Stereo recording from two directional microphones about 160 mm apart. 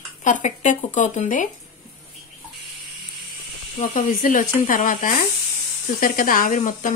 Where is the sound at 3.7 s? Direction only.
50° left (ahead or behind).